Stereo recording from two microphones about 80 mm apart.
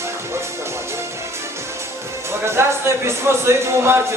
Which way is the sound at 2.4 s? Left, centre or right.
Right.